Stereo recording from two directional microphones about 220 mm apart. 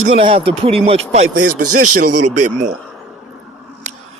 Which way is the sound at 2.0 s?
90° right.